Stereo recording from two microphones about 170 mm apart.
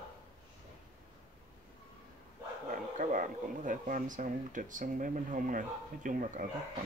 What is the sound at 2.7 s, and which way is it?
Speech, 50° right (ahead or behind).